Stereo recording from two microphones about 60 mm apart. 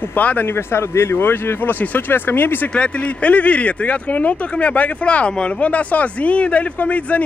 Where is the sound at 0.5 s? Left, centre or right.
Left.